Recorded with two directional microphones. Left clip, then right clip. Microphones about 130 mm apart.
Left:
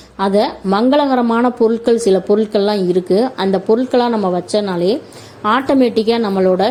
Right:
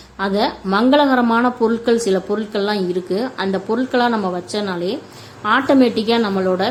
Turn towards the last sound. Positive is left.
turn(degrees=30)  # may be behind; listen again after turning